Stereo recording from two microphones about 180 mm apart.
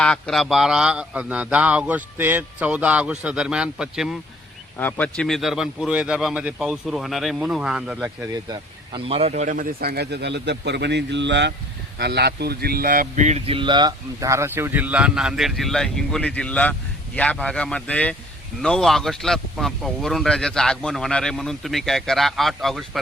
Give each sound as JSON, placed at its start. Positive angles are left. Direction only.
{"t": 0.0, "sound": "speech", "side_deg": 5}
{"t": 4.8, "sound": "speech", "side_deg": 10}
{"t": 8.4, "sound": "speech", "side_deg": -30}
{"t": 11.9, "sound": "speech", "side_deg": -65}